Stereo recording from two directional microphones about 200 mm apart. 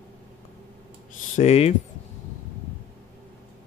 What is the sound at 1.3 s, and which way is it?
Speech, 30° left (ahead or behind).